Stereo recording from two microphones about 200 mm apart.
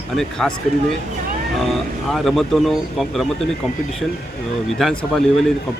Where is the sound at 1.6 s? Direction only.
Centre (ahead or behind).